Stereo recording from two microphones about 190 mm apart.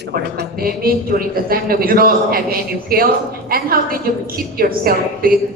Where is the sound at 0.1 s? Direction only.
50° right (ahead or behind).